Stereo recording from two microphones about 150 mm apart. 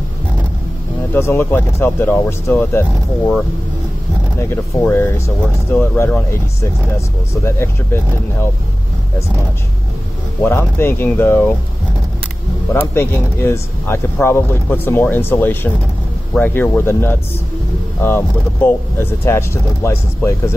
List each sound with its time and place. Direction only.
1.1 s speech: 15° left (ahead or behind)
4.4 s speech: 15° left (ahead or behind)
10.4 s speech: 15° left (ahead or behind)
12.7 s speech: 15° left (ahead or behind)